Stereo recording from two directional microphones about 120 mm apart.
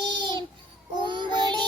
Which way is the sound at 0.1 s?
40° right (ahead or behind).